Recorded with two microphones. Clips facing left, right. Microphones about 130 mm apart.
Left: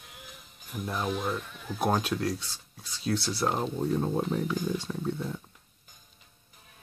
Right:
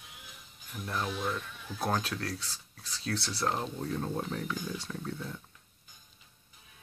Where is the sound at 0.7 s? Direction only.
20° left (ahead or behind).